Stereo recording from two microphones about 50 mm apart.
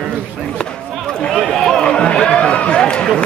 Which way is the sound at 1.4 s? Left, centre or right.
Centre.